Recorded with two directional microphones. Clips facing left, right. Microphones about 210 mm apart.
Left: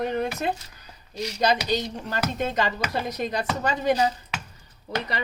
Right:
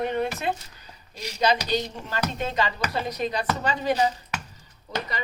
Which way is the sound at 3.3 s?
45° left (ahead or behind).